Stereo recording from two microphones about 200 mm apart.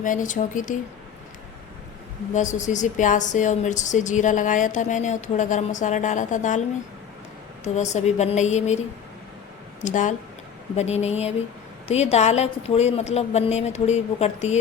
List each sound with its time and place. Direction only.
0.0 s a woman's voice: 40° left (ahead or behind)
2.3 s a woman's voice: 40° left (ahead or behind)
7.6 s a woman's voice: 35° left (ahead or behind)
9.8 s a woman's voice: 40° left (ahead or behind)